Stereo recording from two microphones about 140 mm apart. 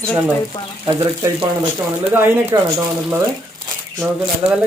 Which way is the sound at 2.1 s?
15° right (ahead or behind).